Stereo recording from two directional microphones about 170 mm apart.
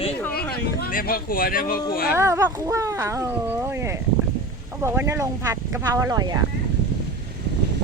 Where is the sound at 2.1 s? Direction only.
15° right (ahead or behind).